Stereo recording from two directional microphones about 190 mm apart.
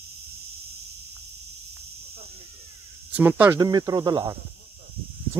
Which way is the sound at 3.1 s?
10° right (ahead or behind).